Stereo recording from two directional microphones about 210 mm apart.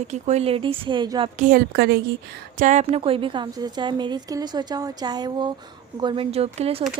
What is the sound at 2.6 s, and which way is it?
A woman's voice, 35° right (ahead or behind).